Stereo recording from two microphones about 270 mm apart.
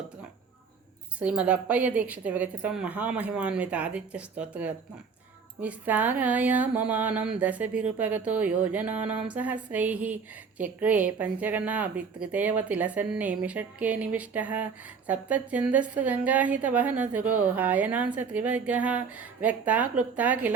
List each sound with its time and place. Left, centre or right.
1.2 s speech: centre